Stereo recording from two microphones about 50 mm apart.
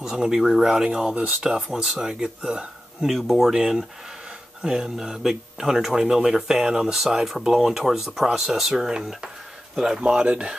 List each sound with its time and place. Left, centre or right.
0.0 s speech: centre
3.1 s speech: centre
4.6 s speech: centre